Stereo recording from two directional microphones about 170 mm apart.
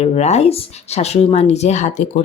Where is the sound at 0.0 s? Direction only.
40° left (ahead or behind).